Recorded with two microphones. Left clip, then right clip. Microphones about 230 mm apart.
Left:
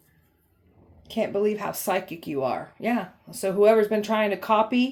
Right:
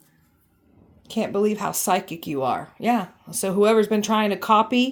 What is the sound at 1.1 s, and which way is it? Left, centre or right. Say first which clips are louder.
Speech: right 2 dB; right.